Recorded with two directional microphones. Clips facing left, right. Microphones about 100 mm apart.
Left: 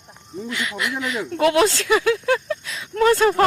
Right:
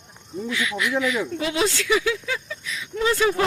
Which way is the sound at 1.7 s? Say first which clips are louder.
Left 2 dB; 35° left (ahead or behind).